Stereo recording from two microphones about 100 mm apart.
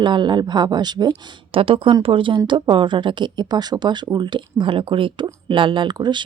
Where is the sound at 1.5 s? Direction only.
65° right (ahead or behind).